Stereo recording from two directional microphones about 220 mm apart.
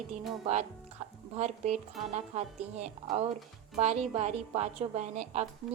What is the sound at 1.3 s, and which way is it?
A woman's voice, 30° right (ahead or behind).